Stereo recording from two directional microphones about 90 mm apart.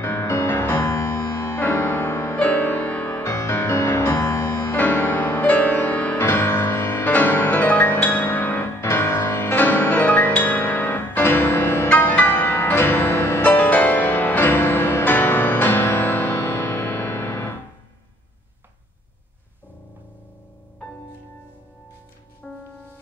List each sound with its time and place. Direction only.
0.0 s music: 30° left (ahead or behind)
4.7 s music: 20° left (ahead or behind)
7.1 s music: 20° left (ahead or behind)
22.4 s music: 10° left (ahead or behind)